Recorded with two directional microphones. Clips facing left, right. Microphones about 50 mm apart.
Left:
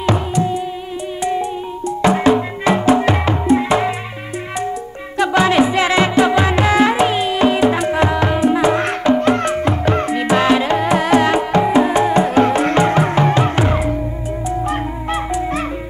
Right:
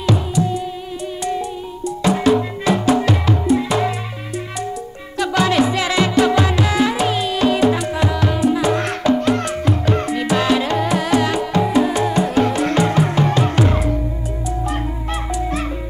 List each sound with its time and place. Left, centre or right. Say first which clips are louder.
0.0 s music: left 2 dB; left
5.1 s music: left 3 dB; left
7.7 s music: left 4 dB; left